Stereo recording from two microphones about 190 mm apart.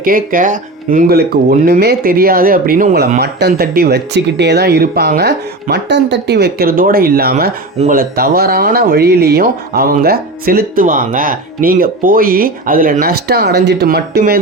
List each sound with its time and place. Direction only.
0.0 s speech: 45° right (ahead or behind)